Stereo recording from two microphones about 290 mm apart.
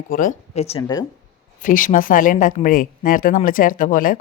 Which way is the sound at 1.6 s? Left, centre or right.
Left.